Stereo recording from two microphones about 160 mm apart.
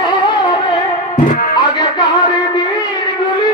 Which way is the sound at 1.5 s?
25° left (ahead or behind).